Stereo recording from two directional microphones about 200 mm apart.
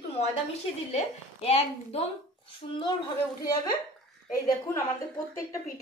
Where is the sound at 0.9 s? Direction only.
30° left (ahead or behind).